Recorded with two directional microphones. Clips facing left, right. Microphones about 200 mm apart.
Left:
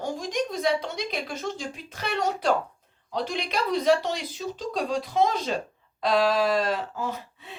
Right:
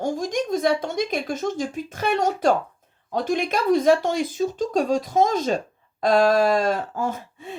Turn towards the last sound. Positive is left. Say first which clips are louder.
# right 5 dB
turn(degrees=-50)  # may be behind; listen again after turning